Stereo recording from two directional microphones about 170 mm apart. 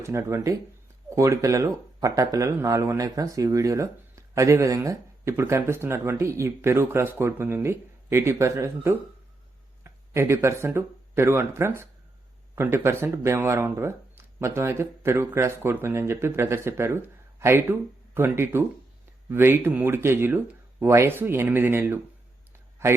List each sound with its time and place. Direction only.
0.0 s speech: 15° right (ahead or behind)